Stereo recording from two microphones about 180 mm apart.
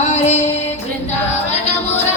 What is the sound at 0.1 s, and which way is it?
Music, 40° left (ahead or behind).